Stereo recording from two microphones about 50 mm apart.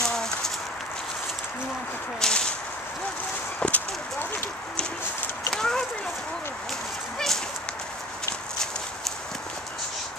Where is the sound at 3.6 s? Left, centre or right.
Left.